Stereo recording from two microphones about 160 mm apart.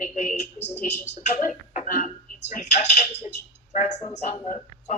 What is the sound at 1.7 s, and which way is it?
Hiccup, 50° left (ahead or behind).